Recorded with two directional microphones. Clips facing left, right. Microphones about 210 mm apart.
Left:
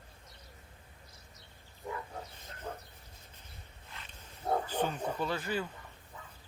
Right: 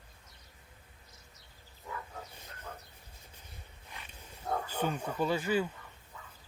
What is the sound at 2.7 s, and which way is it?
Bow-wow, 30° left (ahead or behind).